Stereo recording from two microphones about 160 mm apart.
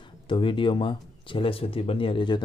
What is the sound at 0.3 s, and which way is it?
Speech, 30° left (ahead or behind).